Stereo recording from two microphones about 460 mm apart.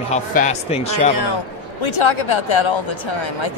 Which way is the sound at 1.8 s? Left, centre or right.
Left.